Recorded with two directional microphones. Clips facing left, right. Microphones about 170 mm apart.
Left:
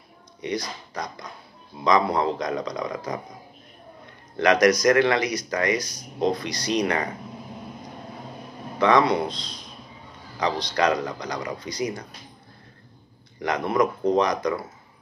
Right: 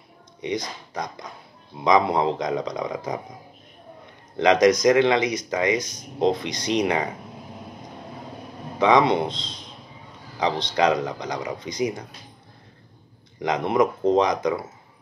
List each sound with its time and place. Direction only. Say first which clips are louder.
0.4 s speech: right 1 dB; 20° right (ahead or behind)
4.4 s speech: right 2 dB; 20° right (ahead or behind)
8.7 s speech: right 1 dB; 20° right (ahead or behind)
13.4 s speech: right 2 dB; 20° right (ahead or behind)